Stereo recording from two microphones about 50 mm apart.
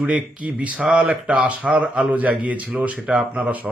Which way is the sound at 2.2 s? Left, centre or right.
Right.